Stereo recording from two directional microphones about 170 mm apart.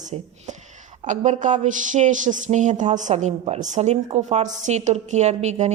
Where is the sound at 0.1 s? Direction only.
35° right (ahead or behind).